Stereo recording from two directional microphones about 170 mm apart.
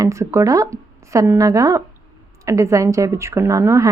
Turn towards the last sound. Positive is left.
turn(degrees=-20)  # may be behind; listen again after turning